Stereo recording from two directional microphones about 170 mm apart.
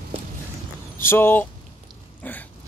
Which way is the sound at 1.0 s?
15° left (ahead or behind).